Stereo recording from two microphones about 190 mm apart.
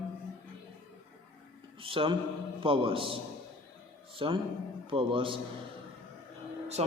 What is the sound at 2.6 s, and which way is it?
A man's voice, 30° right (ahead or behind).